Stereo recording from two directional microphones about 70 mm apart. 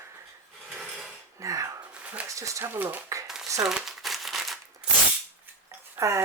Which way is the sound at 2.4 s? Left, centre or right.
Right.